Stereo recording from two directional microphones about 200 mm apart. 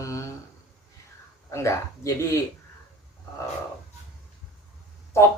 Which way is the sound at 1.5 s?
15° left (ahead or behind).